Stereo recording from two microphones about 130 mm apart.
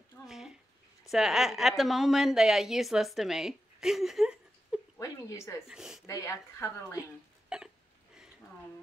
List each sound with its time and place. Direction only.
0.3 s a sound: 5° right (ahead or behind)
1.1 s a woman's voice: centre (ahead or behind)
4.9 s a sound: 25° left (ahead or behind)
5.7 s a woman's voice: 5° right (ahead or behind)
6.0 s speech: 25° left (ahead or behind)
7.4 s hiccup: 5° right (ahead or behind)